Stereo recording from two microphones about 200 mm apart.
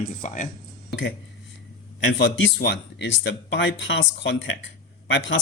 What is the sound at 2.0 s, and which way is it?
Speech, 60° left (ahead or behind).